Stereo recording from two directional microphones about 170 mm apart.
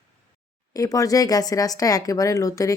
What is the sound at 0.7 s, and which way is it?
A woman's voice, 20° left (ahead or behind).